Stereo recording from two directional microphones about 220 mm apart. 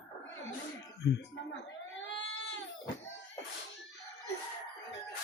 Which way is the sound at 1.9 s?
55° left (ahead or behind).